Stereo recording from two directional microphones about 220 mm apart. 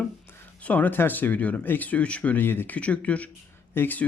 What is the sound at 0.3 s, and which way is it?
Speech, 5° left (ahead or behind).